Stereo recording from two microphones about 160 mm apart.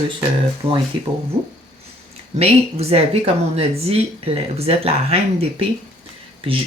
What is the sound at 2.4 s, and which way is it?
A woman's voice, 40° right (ahead or behind).